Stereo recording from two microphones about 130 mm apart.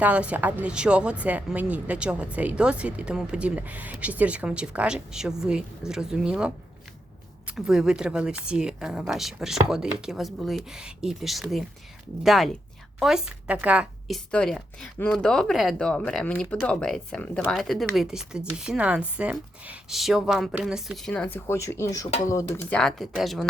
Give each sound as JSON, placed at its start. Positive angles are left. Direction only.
{"t": 0.0, "sound": "a woman's voice", "side_deg": -10}
{"t": 14.1, "sound": "speech", "side_deg": 5}
{"t": 22.7, "sound": "speech", "side_deg": 5}